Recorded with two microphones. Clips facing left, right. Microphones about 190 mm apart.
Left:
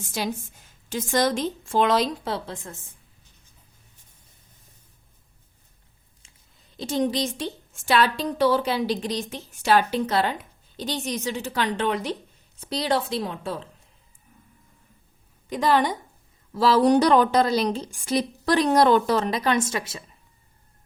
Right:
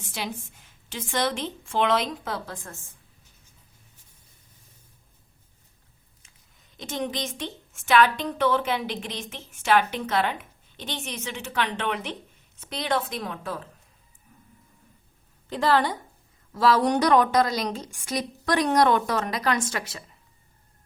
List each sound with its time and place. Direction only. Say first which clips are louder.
0.2 s a woman's voice: left 5 dB; 40° left (ahead or behind); by 2.7 s 25° left (ahead or behind)
6.7 s a woman's voice: left 6 dB; 35° left (ahead or behind)
15.4 s a woman's voice: left 1 dB; 15° left (ahead or behind)
16.6 s a woman's voice: left 3 dB; 30° left (ahead or behind)